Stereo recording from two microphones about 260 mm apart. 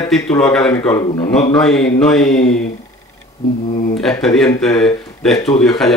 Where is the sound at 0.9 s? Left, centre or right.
Centre.